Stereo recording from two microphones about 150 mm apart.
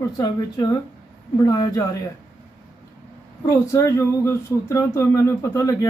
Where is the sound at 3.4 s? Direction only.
20° left (ahead or behind).